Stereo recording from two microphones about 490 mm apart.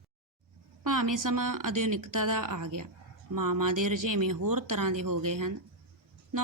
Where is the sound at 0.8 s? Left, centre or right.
Right.